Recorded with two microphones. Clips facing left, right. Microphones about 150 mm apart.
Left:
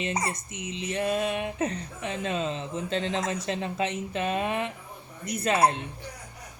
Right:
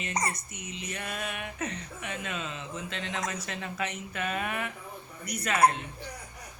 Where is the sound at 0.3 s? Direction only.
25° left (ahead or behind).